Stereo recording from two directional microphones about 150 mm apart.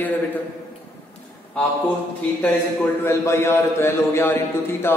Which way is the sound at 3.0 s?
15° left (ahead or behind).